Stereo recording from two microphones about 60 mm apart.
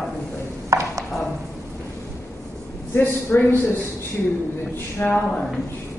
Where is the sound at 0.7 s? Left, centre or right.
Right.